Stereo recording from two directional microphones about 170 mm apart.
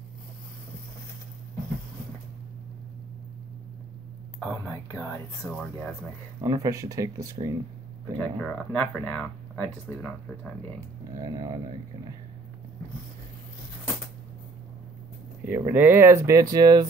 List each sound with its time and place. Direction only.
4.4 s speech: 10° left (ahead or behind)
5.4 s speech: centre (ahead or behind)
6.4 s speech: 20° right (ahead or behind)
8.2 s speech: 5° left (ahead or behind)
11.2 s speech: 20° right (ahead or behind)
15.4 s speech: 10° right (ahead or behind)